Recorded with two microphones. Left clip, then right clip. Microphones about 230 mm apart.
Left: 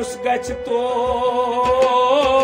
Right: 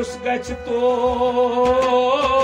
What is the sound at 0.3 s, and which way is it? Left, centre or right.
Speech, left.